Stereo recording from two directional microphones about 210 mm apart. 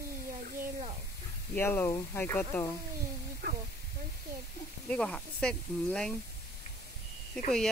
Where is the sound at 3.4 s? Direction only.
50° right (ahead or behind).